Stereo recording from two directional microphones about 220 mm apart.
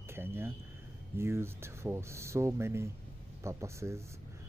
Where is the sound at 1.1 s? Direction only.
10° right (ahead or behind).